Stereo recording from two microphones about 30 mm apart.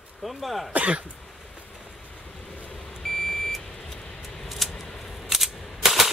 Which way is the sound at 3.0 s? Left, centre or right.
Centre.